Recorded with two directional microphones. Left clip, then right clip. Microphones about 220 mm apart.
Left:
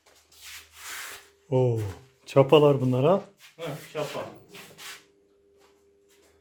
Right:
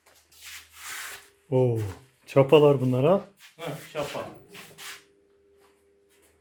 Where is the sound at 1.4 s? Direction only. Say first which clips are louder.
Right 1 dB; 5° left (ahead or behind).